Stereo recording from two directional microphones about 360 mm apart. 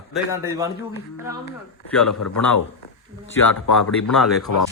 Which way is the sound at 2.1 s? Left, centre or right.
Left.